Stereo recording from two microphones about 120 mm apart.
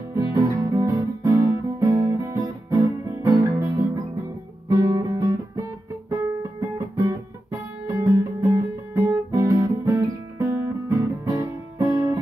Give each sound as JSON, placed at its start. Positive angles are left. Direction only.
{"t": 0.1, "sound": "guitar", "side_deg": -25}
{"t": 4.7, "sound": "music", "side_deg": -25}
{"t": 6.6, "sound": "guitar", "side_deg": -25}